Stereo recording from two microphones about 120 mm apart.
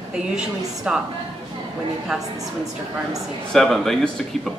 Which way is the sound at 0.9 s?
10° right (ahead or behind).